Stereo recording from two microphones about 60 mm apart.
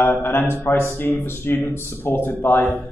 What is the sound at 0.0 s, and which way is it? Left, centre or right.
A man's voice, left.